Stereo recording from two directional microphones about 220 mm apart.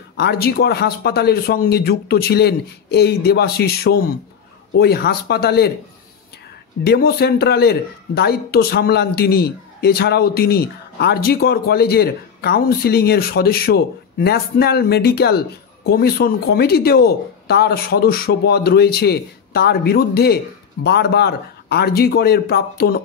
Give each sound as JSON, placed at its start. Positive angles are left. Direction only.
{"t": 0.2, "sound": "speech", "side_deg": 45}
{"t": 6.8, "sound": "speech", "side_deg": 45}